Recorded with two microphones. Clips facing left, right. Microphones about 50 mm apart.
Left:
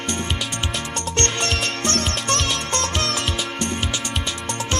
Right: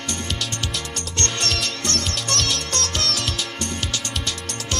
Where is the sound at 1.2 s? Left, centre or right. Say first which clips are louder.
Left 2 dB; left.